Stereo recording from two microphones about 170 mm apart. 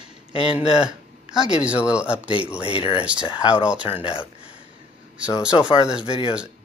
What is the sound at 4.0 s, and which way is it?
Speech, 30° left (ahead or behind).